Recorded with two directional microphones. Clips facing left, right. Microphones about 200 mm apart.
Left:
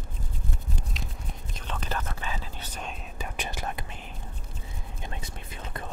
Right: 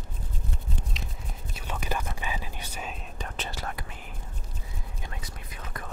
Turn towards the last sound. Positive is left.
turn(degrees=25)  # may be behind; listen again after turning